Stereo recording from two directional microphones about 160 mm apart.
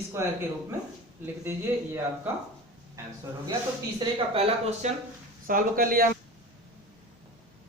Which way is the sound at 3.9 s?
35° right (ahead or behind).